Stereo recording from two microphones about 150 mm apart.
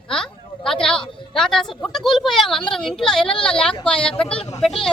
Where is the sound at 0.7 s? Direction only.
5° left (ahead or behind).